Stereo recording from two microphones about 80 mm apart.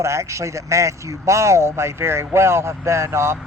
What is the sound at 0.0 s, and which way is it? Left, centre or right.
Speech, right.